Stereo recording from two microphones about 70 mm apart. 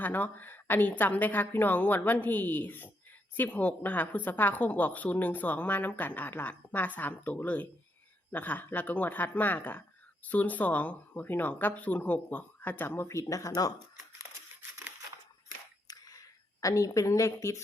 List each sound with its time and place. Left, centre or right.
0.0 s a woman's voice: left
13.1 s speech: left
15.9 s a sound: left